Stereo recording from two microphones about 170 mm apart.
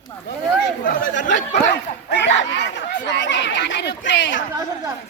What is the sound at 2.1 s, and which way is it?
Chatter, 90° left.